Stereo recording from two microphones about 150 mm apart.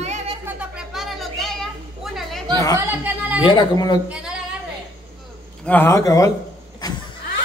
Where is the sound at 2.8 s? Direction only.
15° right (ahead or behind).